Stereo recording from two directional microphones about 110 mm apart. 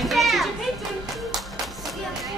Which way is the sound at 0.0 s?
Centre (ahead or behind).